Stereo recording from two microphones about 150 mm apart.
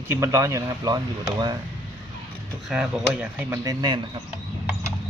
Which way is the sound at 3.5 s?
20° right (ahead or behind).